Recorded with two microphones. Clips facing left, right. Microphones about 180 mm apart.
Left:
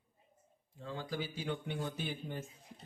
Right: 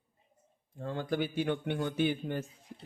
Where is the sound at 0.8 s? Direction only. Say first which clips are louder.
Right 7 dB; 60° right (ahead or behind); by 2.4 s 75° right (ahead or behind).